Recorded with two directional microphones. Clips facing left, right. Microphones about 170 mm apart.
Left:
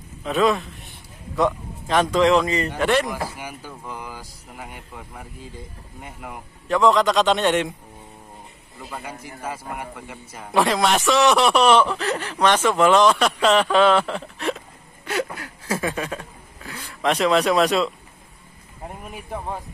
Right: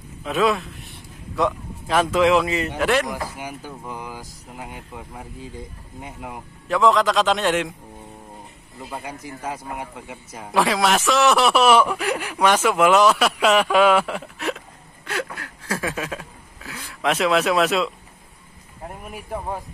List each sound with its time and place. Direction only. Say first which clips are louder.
0.2 s a man's voice: left 1 dB; centre (ahead or behind)
3.1 s speech: even; 15° right (ahead or behind)
6.7 s a man's voice: left 1 dB; centre (ahead or behind)
8.9 s speech: right 2 dB; 15° right (ahead or behind)
10.5 s speech: even; centre (ahead or behind)
15.0 s a sound: left 3 dB; 10° left (ahead or behind)
18.9 s speech: right 1 dB; 5° right (ahead or behind)